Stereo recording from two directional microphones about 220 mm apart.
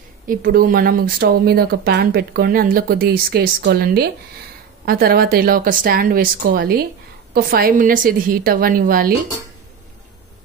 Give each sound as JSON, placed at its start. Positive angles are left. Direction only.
{"t": 0.3, "sound": "speech", "side_deg": -40}